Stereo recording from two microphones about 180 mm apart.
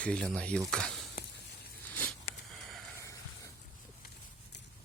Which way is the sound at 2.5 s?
Centre (ahead or behind).